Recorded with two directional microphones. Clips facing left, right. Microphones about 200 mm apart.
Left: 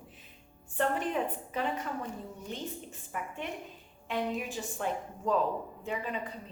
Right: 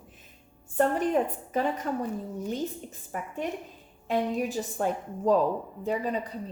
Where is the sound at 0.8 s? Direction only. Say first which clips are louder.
Right 6 dB; 40° right (ahead or behind).